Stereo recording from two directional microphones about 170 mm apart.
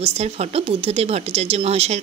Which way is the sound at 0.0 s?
35° right (ahead or behind).